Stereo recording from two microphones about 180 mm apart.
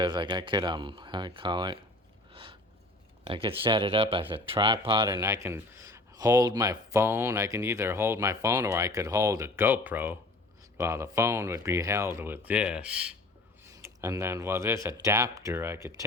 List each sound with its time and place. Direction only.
0.0 s speech: 25° right (ahead or behind)
2.3 s a sound: 30° right (ahead or behind)
3.2 s a man's voice: 30° right (ahead or behind)